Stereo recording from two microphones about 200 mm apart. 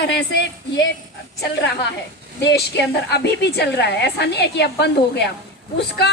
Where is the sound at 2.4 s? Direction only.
60° left (ahead or behind).